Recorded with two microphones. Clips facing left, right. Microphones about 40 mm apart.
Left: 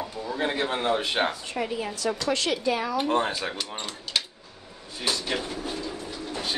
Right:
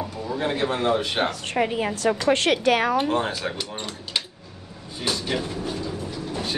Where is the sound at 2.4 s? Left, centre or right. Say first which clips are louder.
Right 6 dB; right.